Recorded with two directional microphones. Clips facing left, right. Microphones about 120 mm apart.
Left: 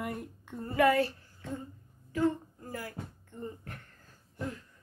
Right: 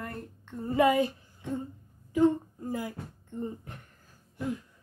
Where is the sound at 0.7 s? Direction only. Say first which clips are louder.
Right 2 dB; 15° right (ahead or behind).